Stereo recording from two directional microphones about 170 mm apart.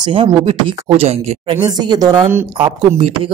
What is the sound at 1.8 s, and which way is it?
Speech, 25° right (ahead or behind).